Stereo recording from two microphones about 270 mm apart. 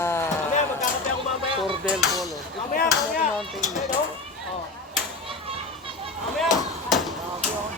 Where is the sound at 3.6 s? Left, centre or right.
Centre.